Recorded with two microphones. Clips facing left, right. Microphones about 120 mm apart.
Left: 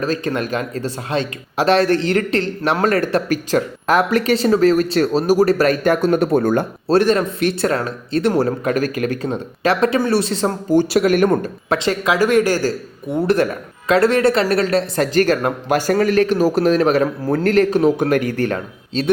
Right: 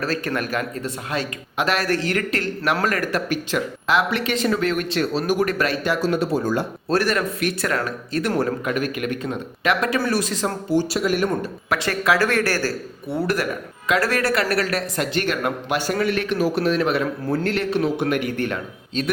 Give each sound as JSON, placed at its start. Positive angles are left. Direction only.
{"t": 0.0, "sound": "speech", "side_deg": 20}
{"t": 6.8, "sound": "speech", "side_deg": 25}
{"t": 10.8, "sound": "a man's voice", "side_deg": 70}
{"t": 11.7, "sound": "speech", "side_deg": 20}